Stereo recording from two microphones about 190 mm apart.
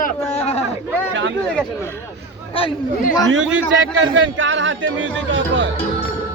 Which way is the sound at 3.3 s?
85° right.